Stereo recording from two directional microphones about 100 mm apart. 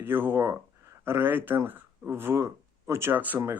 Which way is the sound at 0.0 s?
20° right (ahead or behind).